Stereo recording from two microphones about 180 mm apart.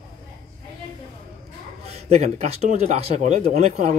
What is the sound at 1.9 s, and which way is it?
Speech, 35° right (ahead or behind).